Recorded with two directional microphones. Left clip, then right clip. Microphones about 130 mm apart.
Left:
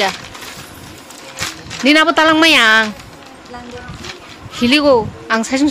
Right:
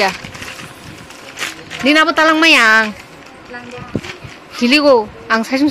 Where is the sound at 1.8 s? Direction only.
20° left (ahead or behind).